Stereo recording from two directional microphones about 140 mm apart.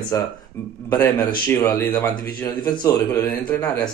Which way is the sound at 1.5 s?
15° left (ahead or behind).